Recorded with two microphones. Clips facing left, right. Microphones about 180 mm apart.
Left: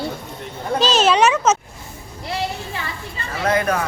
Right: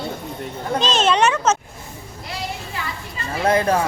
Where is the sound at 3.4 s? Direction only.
30° right (ahead or behind).